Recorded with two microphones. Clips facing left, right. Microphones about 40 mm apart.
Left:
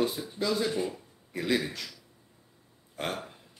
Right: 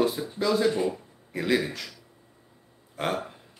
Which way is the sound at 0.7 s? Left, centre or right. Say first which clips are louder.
Right 5 dB; centre.